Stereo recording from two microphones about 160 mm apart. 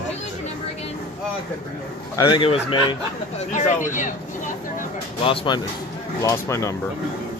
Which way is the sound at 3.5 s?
50° left (ahead or behind).